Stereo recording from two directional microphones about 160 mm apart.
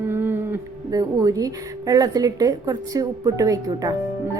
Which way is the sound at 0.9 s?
25° right (ahead or behind).